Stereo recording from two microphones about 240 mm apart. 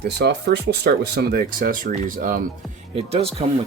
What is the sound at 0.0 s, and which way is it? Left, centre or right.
Speech, right.